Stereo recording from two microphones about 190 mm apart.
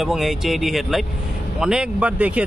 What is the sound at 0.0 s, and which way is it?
Speech, centre (ahead or behind).